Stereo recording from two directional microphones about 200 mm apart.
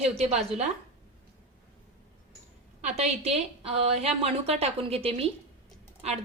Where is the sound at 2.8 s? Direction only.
35° right (ahead or behind).